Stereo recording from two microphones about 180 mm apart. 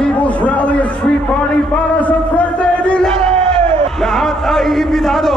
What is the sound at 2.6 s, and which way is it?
Music, 5° left (ahead or behind).